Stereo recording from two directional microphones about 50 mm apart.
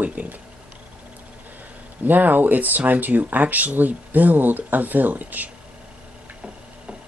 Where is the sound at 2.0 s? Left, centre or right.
Right.